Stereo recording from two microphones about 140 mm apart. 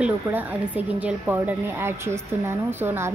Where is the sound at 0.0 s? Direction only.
10° right (ahead or behind).